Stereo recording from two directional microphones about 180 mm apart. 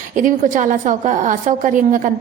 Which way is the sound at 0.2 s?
45° right (ahead or behind).